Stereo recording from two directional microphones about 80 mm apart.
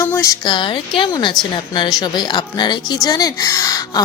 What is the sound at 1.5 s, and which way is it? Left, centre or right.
Speech, left.